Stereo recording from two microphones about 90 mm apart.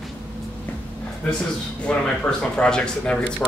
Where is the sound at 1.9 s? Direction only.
10° left (ahead or behind).